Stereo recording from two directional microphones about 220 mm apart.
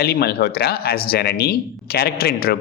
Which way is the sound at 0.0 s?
45° left (ahead or behind).